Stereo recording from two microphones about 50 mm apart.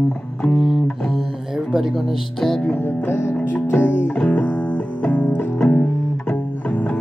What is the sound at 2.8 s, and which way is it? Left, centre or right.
Music, left.